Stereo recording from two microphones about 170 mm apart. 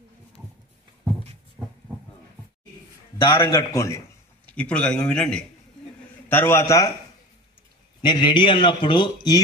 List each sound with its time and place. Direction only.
1.6 s a sound: 10° right (ahead or behind)
3.3 s a man's voice: 15° left (ahead or behind)
4.6 s a man's voice: 5° left (ahead or behind)
8.0 s a man's voice: 25° left (ahead or behind)